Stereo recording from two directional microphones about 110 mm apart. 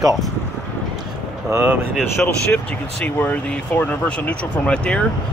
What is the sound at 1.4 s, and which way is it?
Speech, 20° right (ahead or behind).